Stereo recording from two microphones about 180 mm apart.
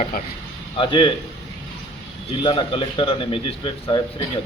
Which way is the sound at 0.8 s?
30° left (ahead or behind).